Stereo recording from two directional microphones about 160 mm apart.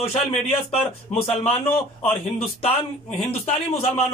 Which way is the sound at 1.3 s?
40° left (ahead or behind).